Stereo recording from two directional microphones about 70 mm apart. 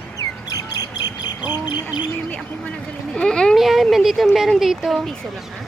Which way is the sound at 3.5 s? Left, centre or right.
Centre.